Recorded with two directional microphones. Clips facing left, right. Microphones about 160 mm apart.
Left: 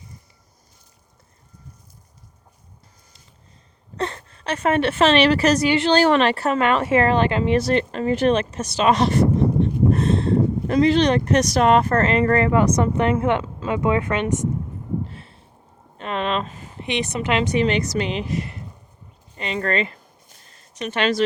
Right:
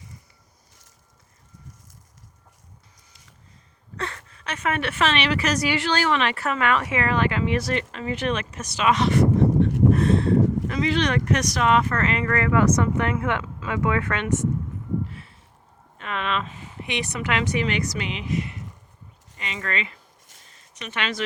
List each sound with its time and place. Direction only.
3.9 s a woman's voice: 25° left (ahead or behind)
6.1 s speech: 35° left (ahead or behind)
9.9 s a sound: 25° left (ahead or behind)
10.7 s speech: 35° left (ahead or behind)
13.4 s speech: 35° left (ahead or behind)
13.7 s speech: 20° left (ahead or behind)
15.0 s a sound: 30° left (ahead or behind)
16.0 s speech: 30° left (ahead or behind)
16.8 s speech: 20° left (ahead or behind); by 20.0 s 40° left (ahead or behind)
20.5 s a sound: 40° left (ahead or behind)